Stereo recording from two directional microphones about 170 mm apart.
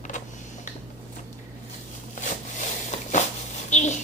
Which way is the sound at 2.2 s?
45° left (ahead or behind).